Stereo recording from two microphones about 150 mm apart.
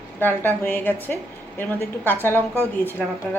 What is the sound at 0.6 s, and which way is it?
A woman's voice, 15° left (ahead or behind).